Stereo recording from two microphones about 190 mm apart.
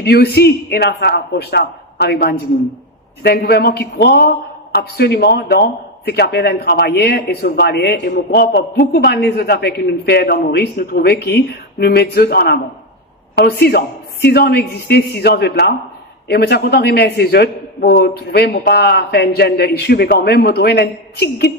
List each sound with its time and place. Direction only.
0.0 s a man's voice: 55° left (ahead or behind)